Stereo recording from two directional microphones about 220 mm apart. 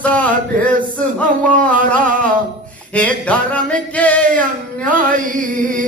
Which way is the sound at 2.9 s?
5° left (ahead or behind).